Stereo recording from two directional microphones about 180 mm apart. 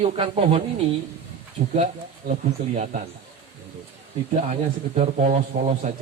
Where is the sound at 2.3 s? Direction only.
45° right (ahead or behind).